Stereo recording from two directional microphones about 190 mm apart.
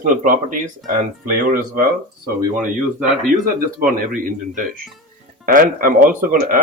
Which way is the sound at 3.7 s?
45° right (ahead or behind).